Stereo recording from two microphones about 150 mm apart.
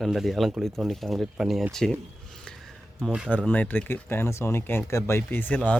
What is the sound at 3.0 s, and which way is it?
Speech, 5° right (ahead or behind).